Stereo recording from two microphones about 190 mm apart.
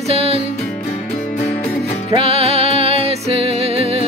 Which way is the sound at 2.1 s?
30° right (ahead or behind).